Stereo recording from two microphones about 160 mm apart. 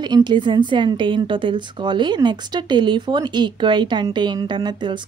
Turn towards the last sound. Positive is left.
turn(degrees=-30)  # may be behind; listen again after turning